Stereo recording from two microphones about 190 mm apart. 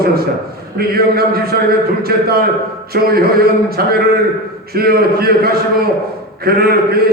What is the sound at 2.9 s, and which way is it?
Speech, 55° right (ahead or behind).